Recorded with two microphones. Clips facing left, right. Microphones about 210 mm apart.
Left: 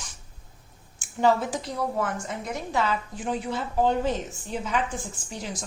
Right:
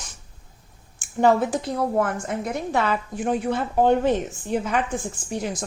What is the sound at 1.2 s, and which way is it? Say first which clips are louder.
A woman's voice: right 4 dB; 55° right (ahead or behind).